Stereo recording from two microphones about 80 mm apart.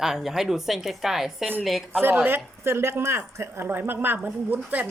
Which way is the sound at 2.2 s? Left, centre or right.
Right.